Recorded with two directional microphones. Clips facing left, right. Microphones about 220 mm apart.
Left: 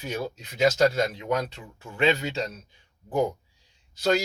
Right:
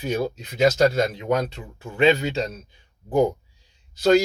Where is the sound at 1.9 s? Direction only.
20° right (ahead or behind).